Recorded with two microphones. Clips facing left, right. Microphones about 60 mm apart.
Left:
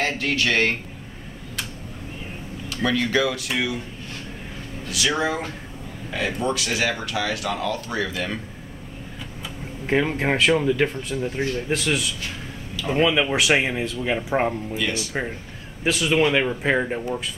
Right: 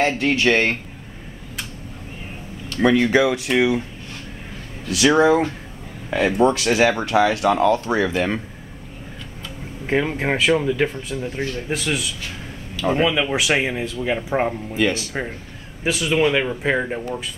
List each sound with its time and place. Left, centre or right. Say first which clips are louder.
0.0 s speech: right 5 dB; right
2.8 s speech: right 6 dB; right
4.9 s speech: right 9 dB; right
9.8 s speech: right 1 dB; centre
13.1 s speech: even; centre
14.8 s speech: right 8 dB; right
15.8 s speech: right 1 dB; centre